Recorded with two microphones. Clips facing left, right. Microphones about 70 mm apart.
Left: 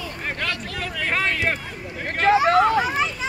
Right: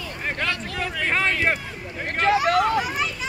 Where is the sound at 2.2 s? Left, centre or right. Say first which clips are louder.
Left 3 dB; left.